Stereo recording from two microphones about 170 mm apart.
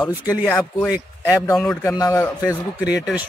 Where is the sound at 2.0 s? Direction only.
20° left (ahead or behind).